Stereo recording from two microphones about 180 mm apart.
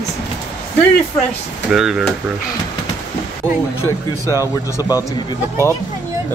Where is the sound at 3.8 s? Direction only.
15° left (ahead or behind).